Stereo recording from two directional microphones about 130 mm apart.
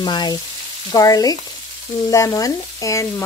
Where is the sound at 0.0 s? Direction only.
35° left (ahead or behind).